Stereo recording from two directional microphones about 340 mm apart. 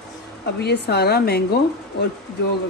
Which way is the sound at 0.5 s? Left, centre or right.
Left.